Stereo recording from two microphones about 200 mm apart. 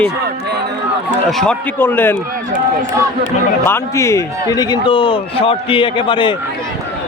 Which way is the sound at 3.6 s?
15° left (ahead or behind).